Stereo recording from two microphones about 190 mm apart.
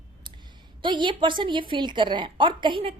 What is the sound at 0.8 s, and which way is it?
A woman's voice, 25° right (ahead or behind).